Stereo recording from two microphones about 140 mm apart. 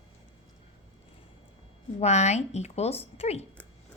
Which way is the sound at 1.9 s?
50° left (ahead or behind).